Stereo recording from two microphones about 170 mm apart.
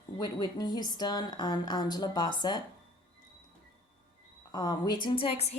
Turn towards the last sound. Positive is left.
turn(degrees=35)  # may be behind; listen again after turning